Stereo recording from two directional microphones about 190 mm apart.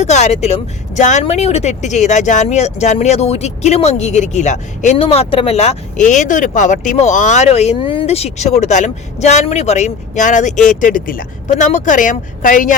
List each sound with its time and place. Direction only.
0.0 s speech: 35° left (ahead or behind)